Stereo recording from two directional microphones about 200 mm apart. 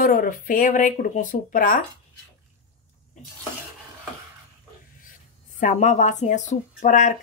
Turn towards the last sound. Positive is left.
turn(degrees=40)  # may be behind; listen again after turning